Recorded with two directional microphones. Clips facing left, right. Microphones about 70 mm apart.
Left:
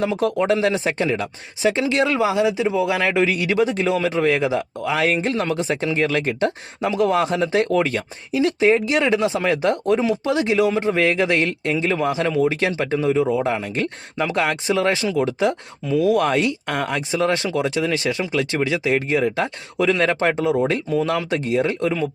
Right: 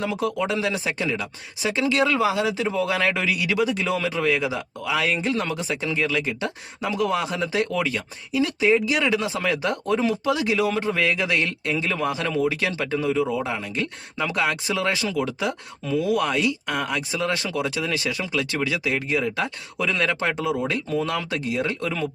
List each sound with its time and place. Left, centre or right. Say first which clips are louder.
0.0 s speech: left 5 dB; left
1.8 s speech: right 2 dB; left
6.8 s speech: left 5 dB; left